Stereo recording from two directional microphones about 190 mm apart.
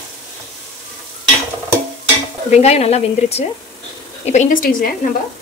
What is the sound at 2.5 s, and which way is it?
A woman's voice, 35° left (ahead or behind).